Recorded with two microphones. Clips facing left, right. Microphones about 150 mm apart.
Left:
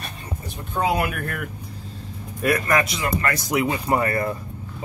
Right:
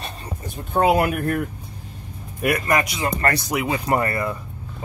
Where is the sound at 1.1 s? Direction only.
30° right (ahead or behind).